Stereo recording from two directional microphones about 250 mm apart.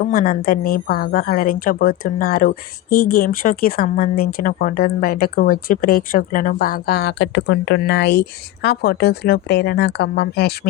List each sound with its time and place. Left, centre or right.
0.0 s speech: left